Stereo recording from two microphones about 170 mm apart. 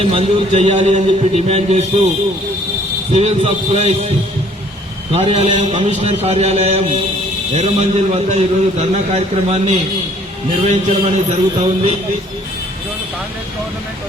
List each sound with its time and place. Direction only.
0.0 s a man's voice: 35° right (ahead or behind)
3.1 s a man's voice: 40° right (ahead or behind)
5.1 s a man's voice: 35° right (ahead or behind)